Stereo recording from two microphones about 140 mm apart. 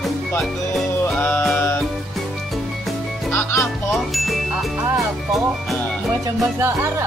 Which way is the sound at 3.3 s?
20° left (ahead or behind).